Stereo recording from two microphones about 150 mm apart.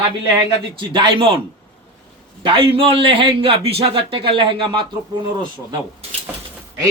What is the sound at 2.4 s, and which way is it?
A man's voice, 35° right (ahead or behind).